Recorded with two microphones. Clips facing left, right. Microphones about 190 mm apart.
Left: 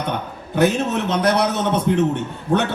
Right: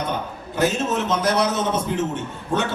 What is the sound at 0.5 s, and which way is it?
A man's voice, 60° left (ahead or behind).